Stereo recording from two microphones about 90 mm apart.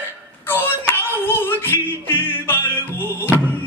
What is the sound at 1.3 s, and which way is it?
Music, 25° left (ahead or behind).